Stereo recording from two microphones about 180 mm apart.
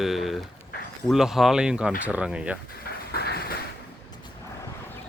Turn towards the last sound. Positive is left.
turn(degrees=60)  # may be behind; listen again after turning